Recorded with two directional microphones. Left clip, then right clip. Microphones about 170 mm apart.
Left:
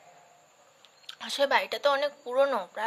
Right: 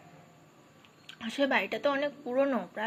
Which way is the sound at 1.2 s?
35° left (ahead or behind).